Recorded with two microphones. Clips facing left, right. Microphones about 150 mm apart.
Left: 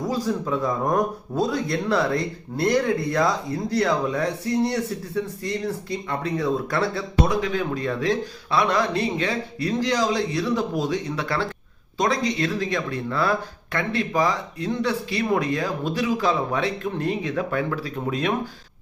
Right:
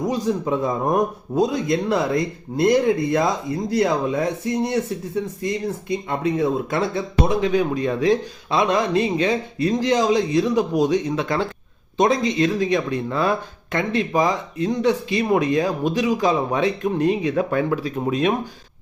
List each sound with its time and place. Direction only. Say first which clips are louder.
0.0 s speech: right 3 dB; 20° right (ahead or behind)